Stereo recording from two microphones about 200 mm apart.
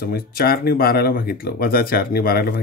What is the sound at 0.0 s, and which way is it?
Speech, 50° left (ahead or behind).